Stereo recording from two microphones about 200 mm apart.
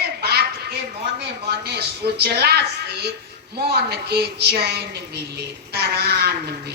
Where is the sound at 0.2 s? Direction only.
55° right (ahead or behind).